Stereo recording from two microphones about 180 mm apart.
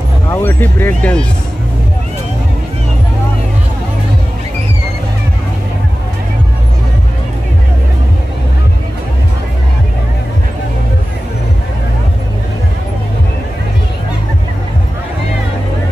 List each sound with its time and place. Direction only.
0.3 s speech: 15° left (ahead or behind)